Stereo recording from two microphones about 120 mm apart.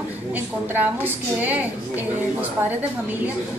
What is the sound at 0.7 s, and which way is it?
Speech, 15° right (ahead or behind).